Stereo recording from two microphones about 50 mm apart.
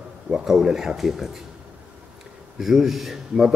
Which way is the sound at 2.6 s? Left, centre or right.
Centre.